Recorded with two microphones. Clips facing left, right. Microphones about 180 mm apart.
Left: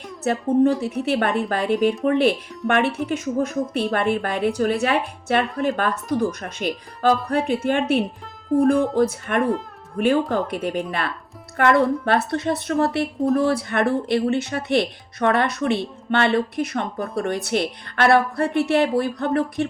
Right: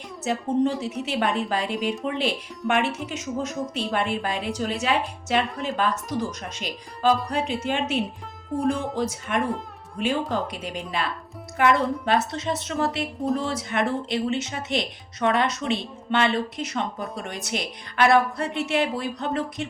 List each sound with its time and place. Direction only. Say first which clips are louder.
0.3 s speech: left 5 dB; 55° left (ahead or behind)